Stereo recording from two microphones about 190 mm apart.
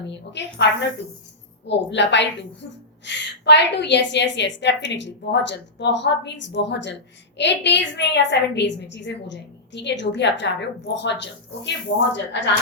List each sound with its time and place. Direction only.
0.1 s a woman's voice: 65° left (ahead or behind)